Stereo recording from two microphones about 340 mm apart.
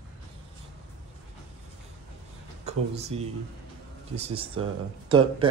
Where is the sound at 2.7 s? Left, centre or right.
Centre.